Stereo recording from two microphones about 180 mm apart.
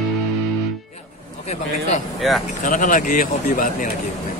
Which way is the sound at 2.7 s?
45° left (ahead or behind).